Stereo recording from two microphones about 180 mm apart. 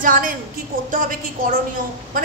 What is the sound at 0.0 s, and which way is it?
Speech, 50° right (ahead or behind).